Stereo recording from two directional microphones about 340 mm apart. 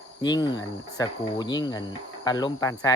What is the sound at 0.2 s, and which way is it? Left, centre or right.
Speech, centre.